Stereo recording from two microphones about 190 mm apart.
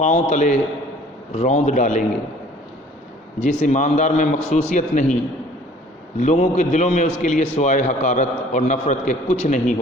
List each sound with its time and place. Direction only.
0.0 s a man's voice: 35° left (ahead or behind)
3.4 s a man's voice: 40° left (ahead or behind)
6.1 s a man's voice: 40° left (ahead or behind)